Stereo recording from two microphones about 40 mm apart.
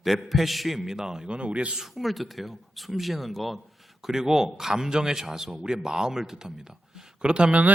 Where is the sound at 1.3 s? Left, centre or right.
Right.